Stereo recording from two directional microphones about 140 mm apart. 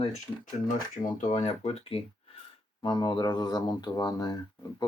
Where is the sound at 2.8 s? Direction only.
35° left (ahead or behind).